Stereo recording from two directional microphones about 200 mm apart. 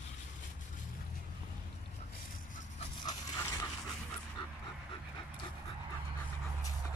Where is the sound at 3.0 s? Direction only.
15° left (ahead or behind).